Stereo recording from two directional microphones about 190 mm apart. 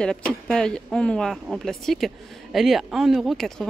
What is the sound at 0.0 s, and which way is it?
Speech, 5° left (ahead or behind).